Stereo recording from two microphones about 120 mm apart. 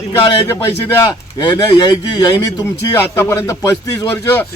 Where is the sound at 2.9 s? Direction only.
20° left (ahead or behind).